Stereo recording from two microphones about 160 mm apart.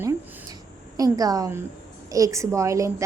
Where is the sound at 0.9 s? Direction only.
20° right (ahead or behind).